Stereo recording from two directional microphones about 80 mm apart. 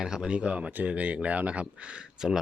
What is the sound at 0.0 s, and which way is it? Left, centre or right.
Speech, centre.